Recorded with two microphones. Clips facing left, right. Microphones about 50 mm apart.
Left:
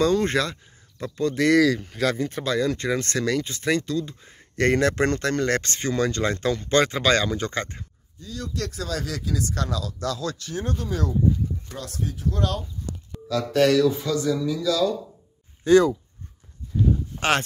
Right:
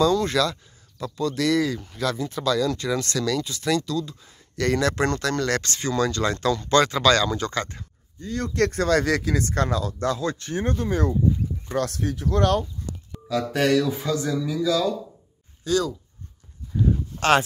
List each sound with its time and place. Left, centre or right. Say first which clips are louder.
0.0 s speech: right 1 dB; left
8.2 s speech: right 8 dB; right
9.5 s speech: right 4 dB; right
11.7 s speech: right 7 dB; right
13.3 s speech: left 1 dB; centre
15.6 s speech: left 7 dB; left